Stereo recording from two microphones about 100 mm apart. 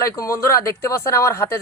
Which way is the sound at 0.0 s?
30° left (ahead or behind).